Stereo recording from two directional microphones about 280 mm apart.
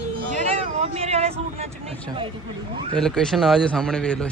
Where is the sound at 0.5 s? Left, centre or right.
Right.